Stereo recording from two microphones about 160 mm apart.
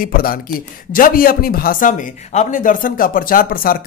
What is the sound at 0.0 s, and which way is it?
A man's voice, 65° left (ahead or behind).